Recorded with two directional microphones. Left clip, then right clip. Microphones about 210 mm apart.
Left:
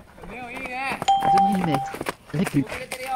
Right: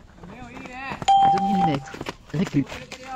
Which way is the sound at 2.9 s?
20° left (ahead or behind).